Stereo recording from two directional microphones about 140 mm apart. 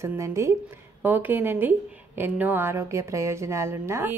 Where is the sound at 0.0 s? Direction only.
20° right (ahead or behind).